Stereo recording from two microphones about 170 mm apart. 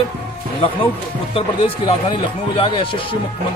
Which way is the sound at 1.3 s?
35° left (ahead or behind).